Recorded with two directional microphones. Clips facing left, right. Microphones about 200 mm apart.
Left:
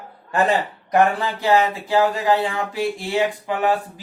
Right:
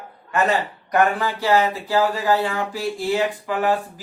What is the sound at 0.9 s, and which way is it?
Speech, 20° left (ahead or behind).